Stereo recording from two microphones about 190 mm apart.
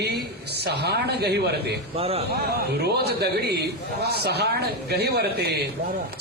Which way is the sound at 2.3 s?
60° right (ahead or behind).